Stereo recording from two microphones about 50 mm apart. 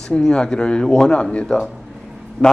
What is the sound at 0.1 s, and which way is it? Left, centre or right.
Speech, centre.